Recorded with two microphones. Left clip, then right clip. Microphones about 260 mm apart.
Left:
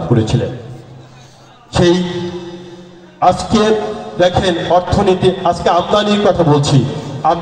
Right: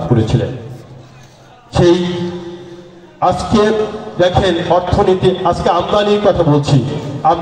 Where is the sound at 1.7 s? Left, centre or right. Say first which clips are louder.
Right 1 dB; left.